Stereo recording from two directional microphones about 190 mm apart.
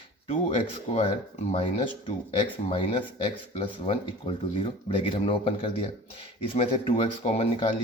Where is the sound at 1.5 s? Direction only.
25° left (ahead or behind).